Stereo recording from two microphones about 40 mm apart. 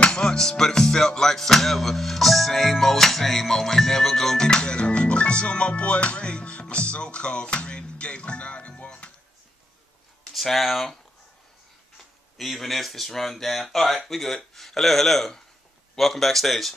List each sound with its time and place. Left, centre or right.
0.0 s music: left
4.5 s music: left
10.3 s speech: centre
12.4 s speech: centre